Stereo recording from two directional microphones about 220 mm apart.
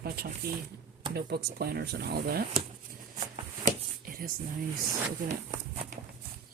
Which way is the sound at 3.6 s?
40° right (ahead or behind).